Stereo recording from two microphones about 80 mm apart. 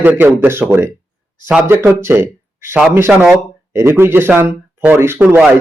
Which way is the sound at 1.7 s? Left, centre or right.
Right.